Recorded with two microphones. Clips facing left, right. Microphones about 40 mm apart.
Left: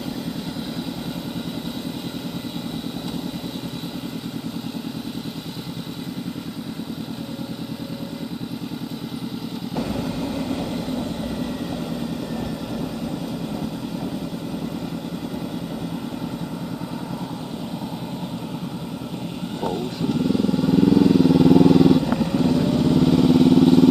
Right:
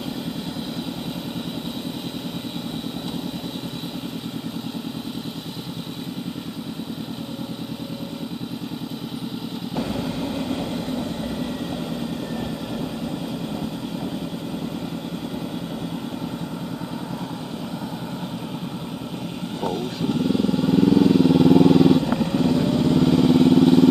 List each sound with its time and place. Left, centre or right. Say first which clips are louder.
10.0 s vehicle: even; centre
19.7 s vehicle: even; centre
22.9 s vehicle: even; right